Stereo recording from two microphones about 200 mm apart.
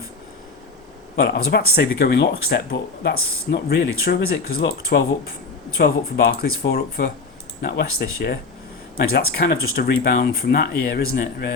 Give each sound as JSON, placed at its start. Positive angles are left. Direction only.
{"t": 1.1, "sound": "speech", "side_deg": 50}